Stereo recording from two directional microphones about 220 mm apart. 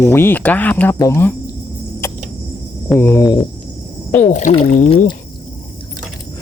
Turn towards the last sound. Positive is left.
turn(degrees=25)  # may be behind; listen again after turning